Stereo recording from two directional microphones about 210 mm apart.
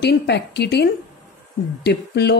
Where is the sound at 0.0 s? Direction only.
55° left (ahead or behind).